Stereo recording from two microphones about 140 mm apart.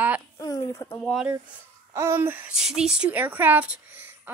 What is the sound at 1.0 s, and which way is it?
Speech, 5° left (ahead or behind).